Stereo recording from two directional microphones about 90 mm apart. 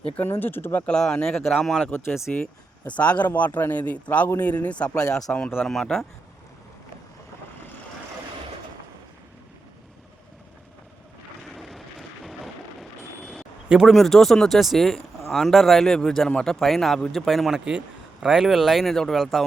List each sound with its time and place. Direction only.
0.2 s speech: 20° left (ahead or behind); by 1.9 s 5° left (ahead or behind)
1.9 s speech: 25° left (ahead or behind)
2.3 s speech: 15° left (ahead or behind)
11.5 s vehicle: centre (ahead or behind)
13.7 s speech: 5° right (ahead or behind)